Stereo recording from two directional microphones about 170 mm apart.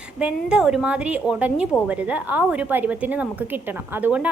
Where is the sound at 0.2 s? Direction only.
5° right (ahead or behind).